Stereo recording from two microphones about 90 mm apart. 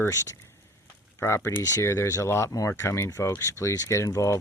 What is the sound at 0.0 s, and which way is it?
Speech, 30° left (ahead or behind).